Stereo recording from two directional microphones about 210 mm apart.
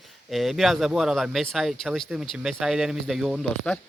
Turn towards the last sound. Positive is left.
turn(degrees=0)  # may be behind; listen again after turning